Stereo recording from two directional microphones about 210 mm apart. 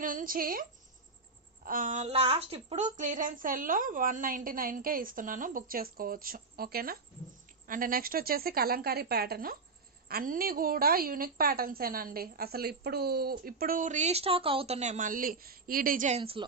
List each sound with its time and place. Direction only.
0.0 s a woman's voice: 40° right (ahead or behind)
1.6 s a woman's voice: 40° right (ahead or behind)